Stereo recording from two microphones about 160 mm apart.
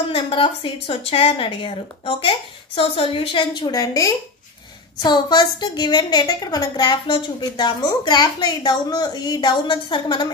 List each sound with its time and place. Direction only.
0.1 s a woman's voice: 35° left (ahead or behind)